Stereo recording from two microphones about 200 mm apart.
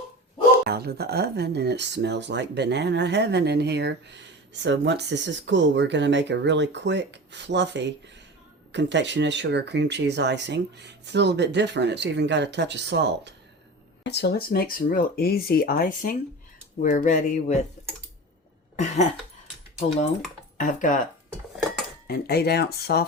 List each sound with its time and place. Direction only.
0.6 s speech: 50° right (ahead or behind)
14.0 s speech: 60° left (ahead or behind); by 17.7 s 35° left (ahead or behind)
20.6 s speech: 40° left (ahead or behind)
22.0 s speech: 50° left (ahead or behind)